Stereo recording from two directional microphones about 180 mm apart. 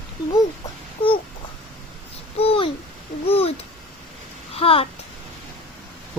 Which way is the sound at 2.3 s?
30° left (ahead or behind).